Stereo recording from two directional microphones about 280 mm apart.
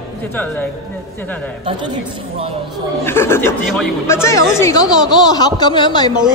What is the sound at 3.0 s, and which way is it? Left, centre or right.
Speech, centre.